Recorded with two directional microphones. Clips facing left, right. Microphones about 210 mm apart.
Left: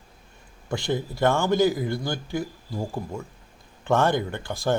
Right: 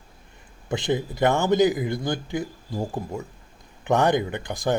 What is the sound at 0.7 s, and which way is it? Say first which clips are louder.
Speech: right 2 dB; 20° right (ahead or behind).